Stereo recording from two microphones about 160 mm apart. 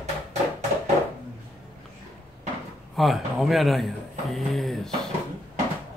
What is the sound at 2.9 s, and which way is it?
Speech, centre (ahead or behind).